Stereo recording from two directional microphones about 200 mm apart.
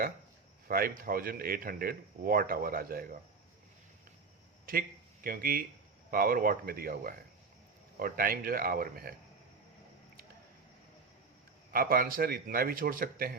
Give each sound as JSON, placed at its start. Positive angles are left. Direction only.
{"t": 0.7, "sound": "speech", "side_deg": -45}
{"t": 4.6, "sound": "speech", "side_deg": -45}
{"t": 11.7, "sound": "speech", "side_deg": -45}